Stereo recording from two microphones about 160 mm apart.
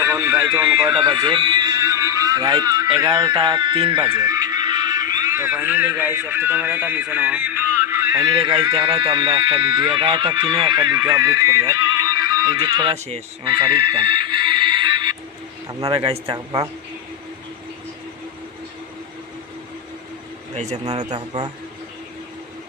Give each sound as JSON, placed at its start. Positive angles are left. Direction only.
{"t": 0.0, "sound": "a sound", "side_deg": -15}
{"t": 0.9, "sound": "speech", "side_deg": -30}
{"t": 7.8, "sound": "a sound", "side_deg": -20}
{"t": 8.4, "sound": "speech", "side_deg": -30}
{"t": 13.4, "sound": "music", "side_deg": -30}
{"t": 15.9, "sound": "speech", "side_deg": -35}
{"t": 16.3, "sound": "speech", "side_deg": -25}
{"t": 21.1, "sound": "speech", "side_deg": -25}